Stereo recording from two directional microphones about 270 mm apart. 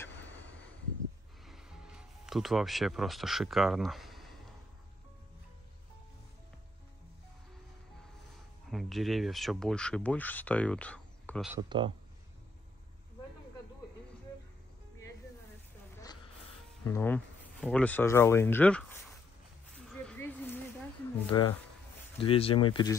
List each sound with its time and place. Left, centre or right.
1.4 s music: centre
8.6 s speech: centre
11.5 s speech: centre
16.8 s speech: centre
20.0 s a sound: centre
21.3 s speech: centre